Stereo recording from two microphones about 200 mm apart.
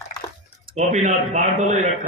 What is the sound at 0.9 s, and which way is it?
Speech, 35° right (ahead or behind).